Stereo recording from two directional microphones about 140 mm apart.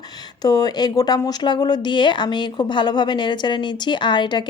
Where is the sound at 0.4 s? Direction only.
30° left (ahead or behind).